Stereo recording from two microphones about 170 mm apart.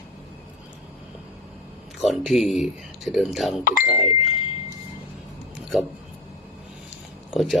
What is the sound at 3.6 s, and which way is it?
Speech, 55° left (ahead or behind).